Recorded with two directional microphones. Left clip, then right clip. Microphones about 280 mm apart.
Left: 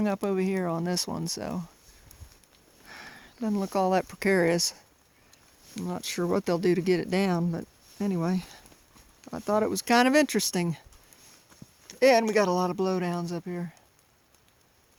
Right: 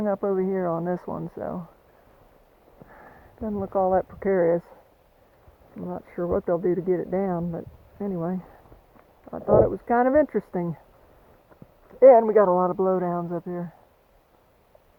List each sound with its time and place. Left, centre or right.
0.0 s speech: left
2.9 s speech: left
11.9 s speech: left